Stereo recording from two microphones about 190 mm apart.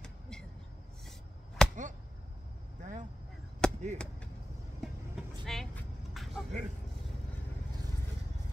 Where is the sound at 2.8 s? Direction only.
40° right (ahead or behind).